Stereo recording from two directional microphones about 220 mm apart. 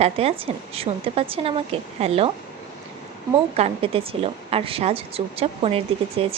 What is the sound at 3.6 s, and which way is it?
A woman's voice, 25° right (ahead or behind).